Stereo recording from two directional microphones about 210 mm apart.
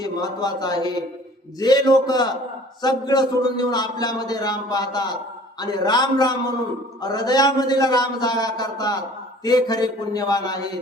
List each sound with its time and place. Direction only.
0.0 s a man's voice: 20° left (ahead or behind)